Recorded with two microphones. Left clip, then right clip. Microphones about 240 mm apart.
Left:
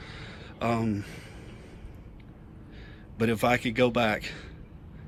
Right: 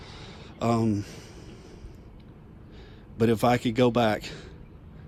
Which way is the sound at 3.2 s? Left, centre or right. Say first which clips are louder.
Right 2 dB; centre.